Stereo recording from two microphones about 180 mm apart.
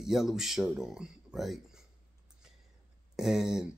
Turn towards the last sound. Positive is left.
turn(degrees=-5)  # may be behind; listen again after turning